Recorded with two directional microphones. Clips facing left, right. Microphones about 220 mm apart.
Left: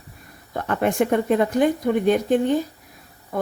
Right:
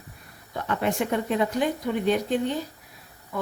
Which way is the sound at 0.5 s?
50° left (ahead or behind).